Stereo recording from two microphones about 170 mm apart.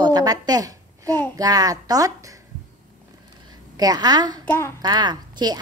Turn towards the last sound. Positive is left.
turn(degrees=-25)  # may be behind; listen again after turning